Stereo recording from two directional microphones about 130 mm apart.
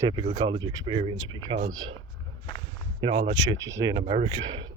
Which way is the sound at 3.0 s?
40° right (ahead or behind).